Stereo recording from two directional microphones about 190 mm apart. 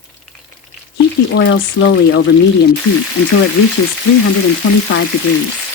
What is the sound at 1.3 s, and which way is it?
Speech, 75° left (ahead or behind).